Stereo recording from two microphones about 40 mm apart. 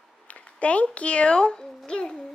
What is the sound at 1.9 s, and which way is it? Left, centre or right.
Music, left.